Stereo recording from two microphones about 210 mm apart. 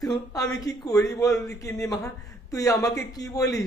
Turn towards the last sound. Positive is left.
turn(degrees=15)  # may be behind; listen again after turning